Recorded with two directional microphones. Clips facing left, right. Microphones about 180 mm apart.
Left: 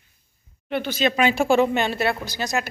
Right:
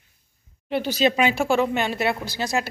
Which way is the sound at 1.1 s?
15° right (ahead or behind).